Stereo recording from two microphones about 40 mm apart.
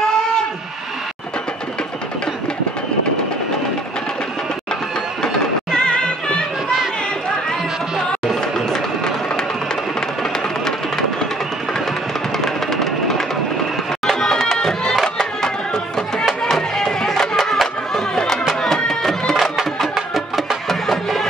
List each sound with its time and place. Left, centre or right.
5.2 s music: centre
8.5 s music: centre
12.4 s music: centre
19.3 s music: centre